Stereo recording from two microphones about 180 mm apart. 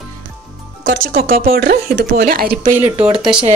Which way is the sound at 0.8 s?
50° right (ahead or behind).